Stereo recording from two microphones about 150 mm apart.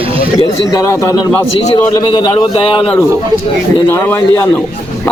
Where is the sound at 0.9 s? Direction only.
15° left (ahead or behind).